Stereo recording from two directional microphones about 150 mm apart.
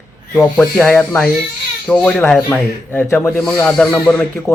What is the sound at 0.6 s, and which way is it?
Speech, 5° left (ahead or behind).